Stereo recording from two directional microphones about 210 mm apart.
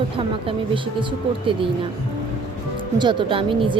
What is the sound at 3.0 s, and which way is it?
Speech, 20° right (ahead or behind).